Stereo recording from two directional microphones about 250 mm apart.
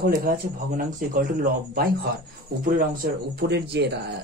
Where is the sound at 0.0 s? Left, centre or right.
Right.